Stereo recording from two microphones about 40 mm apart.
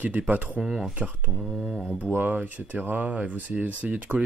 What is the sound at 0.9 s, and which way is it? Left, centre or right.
Speech, right.